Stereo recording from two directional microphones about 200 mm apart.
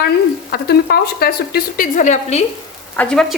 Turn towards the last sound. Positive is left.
turn(degrees=5)  # may be behind; listen again after turning